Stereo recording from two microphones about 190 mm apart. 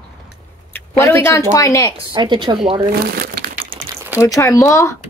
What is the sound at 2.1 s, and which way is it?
Speech, 25° right (ahead or behind).